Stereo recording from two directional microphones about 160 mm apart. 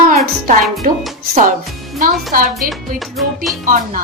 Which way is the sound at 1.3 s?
50° right (ahead or behind).